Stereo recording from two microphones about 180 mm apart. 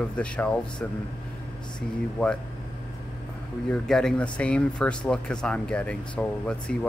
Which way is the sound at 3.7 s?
5° left (ahead or behind).